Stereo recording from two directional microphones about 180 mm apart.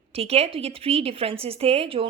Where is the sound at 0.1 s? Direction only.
35° right (ahead or behind).